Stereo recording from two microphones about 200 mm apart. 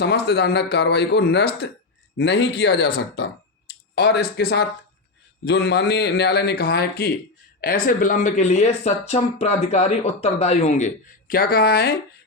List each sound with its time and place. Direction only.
0.0 s speech: 55° left (ahead or behind)